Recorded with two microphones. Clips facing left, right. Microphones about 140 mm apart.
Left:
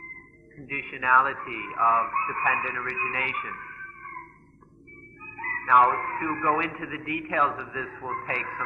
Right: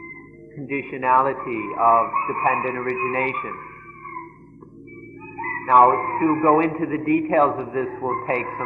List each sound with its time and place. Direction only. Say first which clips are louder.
0.5 s a man's voice: right 12 dB; 40° right (ahead or behind)
5.4 s a man's voice: right 6 dB; 40° right (ahead or behind)